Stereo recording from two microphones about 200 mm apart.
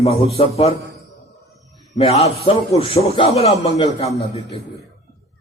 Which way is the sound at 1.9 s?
30° left (ahead or behind).